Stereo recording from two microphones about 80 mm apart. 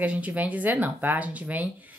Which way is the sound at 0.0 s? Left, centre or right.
Centre.